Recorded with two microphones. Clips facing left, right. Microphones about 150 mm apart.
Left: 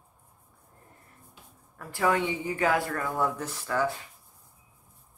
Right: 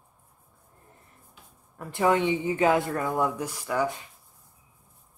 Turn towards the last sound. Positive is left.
turn(degrees=-15)  # may be behind; listen again after turning